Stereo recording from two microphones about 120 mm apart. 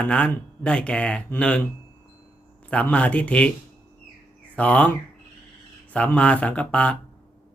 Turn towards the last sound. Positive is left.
turn(degrees=10)  # may be behind; listen again after turning